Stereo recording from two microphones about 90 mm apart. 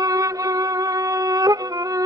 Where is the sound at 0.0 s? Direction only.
40° right (ahead or behind).